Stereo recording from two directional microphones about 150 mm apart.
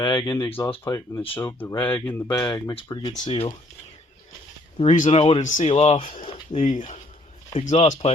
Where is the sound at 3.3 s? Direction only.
35° left (ahead or behind).